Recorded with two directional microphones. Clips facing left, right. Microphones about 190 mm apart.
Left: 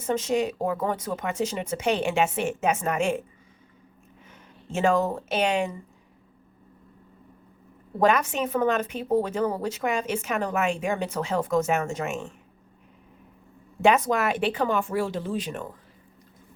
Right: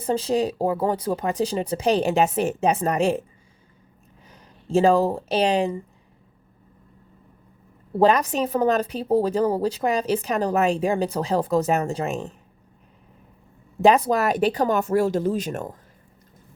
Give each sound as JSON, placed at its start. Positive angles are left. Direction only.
{"t": 0.0, "sound": "speech", "side_deg": -35}
{"t": 4.3, "sound": "speech", "side_deg": -35}
{"t": 7.9, "sound": "speech", "side_deg": -35}
{"t": 13.8, "sound": "speech", "side_deg": -35}